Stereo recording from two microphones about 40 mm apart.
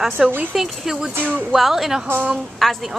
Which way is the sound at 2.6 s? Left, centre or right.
Centre.